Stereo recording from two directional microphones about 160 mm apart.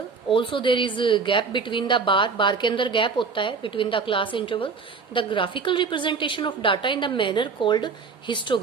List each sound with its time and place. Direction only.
0.3 s a woman's voice: 30° left (ahead or behind)